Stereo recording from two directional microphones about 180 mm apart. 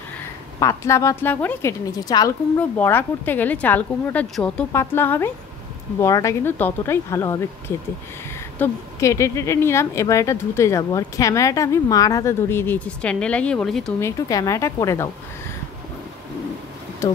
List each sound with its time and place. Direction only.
0.6 s a woman's voice: 15° left (ahead or behind)
13.9 s a woman's voice: 15° left (ahead or behind)
17.0 s speech: 15° left (ahead or behind)